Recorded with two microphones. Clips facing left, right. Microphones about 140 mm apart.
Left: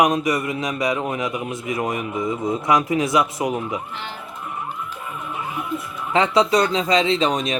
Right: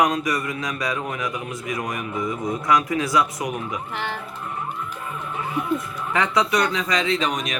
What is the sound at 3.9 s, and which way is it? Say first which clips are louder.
Speech: right 4 dB; 65° right (ahead or behind).